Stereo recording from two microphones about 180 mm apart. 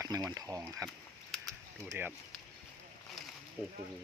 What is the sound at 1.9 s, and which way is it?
Speech, 10° right (ahead or behind).